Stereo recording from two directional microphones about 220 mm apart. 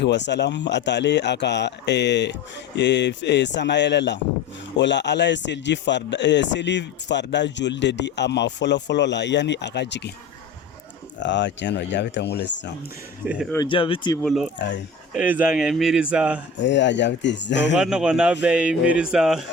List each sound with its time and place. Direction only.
0.0 s speech: 50° left (ahead or behind)
11.2 s speech: 55° left (ahead or behind)
13.5 s speech: 20° left (ahead or behind)
14.2 s speech: centre (ahead or behind)
16.6 s speech: 55° left (ahead or behind)
17.7 s speech: 5° right (ahead or behind)